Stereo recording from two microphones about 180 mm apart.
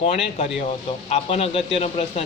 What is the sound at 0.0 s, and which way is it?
Speech, 35° left (ahead or behind).